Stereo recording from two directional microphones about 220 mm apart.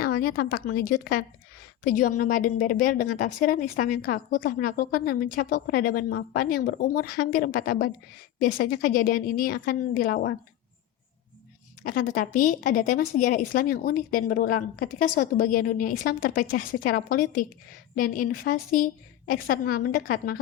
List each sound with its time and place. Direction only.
0.0 s a woman's voice: 40° left (ahead or behind)
11.8 s a woman's voice: 40° left (ahead or behind)